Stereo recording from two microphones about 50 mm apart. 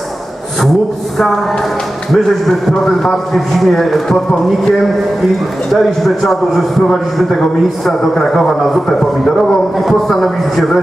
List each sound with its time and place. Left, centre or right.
2.1 s a man's voice: centre